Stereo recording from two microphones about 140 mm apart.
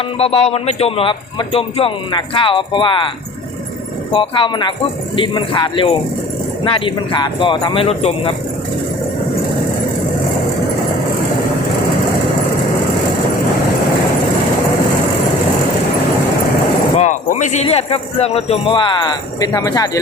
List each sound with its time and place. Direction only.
0.2 s speech: 45° left (ahead or behind)
4.1 s speech: 35° left (ahead or behind)
17.0 s speech: 60° left (ahead or behind); by 20.0 s 25° left (ahead or behind)